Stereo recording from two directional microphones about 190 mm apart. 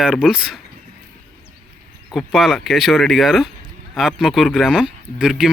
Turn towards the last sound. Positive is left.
turn(degrees=-5)  # may be behind; listen again after turning